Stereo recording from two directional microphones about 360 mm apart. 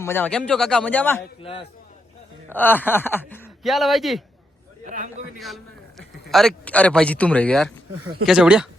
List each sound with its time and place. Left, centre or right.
0.0 s speech: centre
4.9 s speech: centre
6.3 s speech: centre